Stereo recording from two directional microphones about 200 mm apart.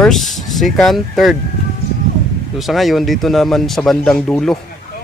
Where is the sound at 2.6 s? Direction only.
Centre (ahead or behind).